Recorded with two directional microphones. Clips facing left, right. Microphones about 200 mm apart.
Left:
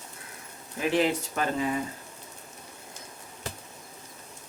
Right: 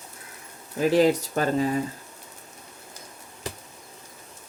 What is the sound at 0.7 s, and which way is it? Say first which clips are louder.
Speech: right 6 dB; 40° right (ahead or behind).